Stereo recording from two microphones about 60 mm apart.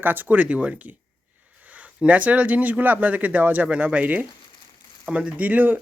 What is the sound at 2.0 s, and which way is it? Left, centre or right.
Speech, right.